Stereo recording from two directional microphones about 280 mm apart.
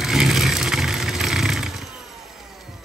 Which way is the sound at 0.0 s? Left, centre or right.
Centre.